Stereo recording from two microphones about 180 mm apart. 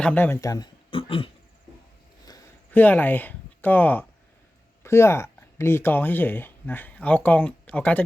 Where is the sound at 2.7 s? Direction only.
10° left (ahead or behind).